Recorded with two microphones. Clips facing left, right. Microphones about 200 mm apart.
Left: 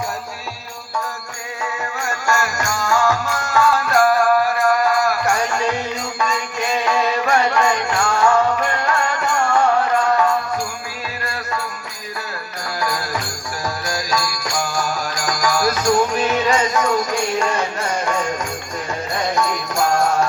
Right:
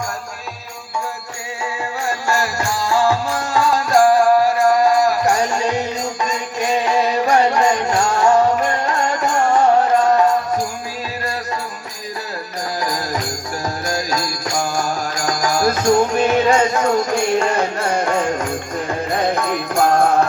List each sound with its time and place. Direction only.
2.0 s music: 35° right (ahead or behind)
5.4 s music: 15° right (ahead or behind)
6.2 s mantra: 35° right (ahead or behind)
6.8 s music: 20° right (ahead or behind)
7.3 s music: 35° right (ahead or behind)
13.8 s music: 20° right (ahead or behind)
15.8 s music: 25° right (ahead or behind)
16.2 s music: 60° right (ahead or behind)
16.8 s music: 25° right (ahead or behind)
17.7 s music: 60° right (ahead or behind)
19.2 s music: 55° right (ahead or behind)